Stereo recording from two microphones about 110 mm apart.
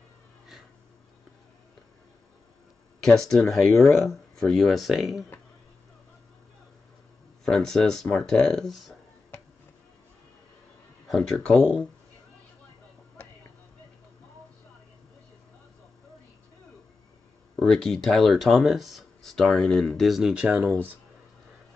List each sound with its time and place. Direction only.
3.0 s speech: 5° left (ahead or behind)
7.4 s speech: 5° left (ahead or behind)
11.1 s speech: 5° left (ahead or behind)
17.6 s speech: 5° left (ahead or behind)
20.4 s speech: 15° right (ahead or behind)